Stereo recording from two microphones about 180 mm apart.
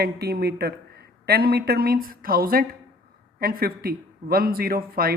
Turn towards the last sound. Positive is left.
turn(degrees=-55)  # may be behind; listen again after turning